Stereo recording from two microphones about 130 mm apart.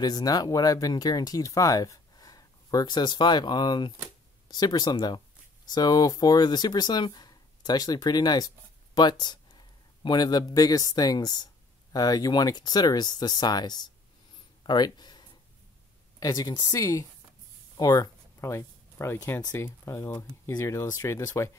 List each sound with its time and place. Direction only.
0.0 s a man's voice: 30° left (ahead or behind)
14.6 s a sound: 35° left (ahead or behind)
16.2 s speech: 30° left (ahead or behind)